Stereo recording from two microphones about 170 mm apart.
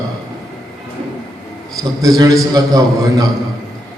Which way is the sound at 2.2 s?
20° right (ahead or behind).